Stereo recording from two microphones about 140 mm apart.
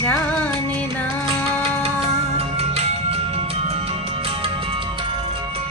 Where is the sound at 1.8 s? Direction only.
45° right (ahead or behind).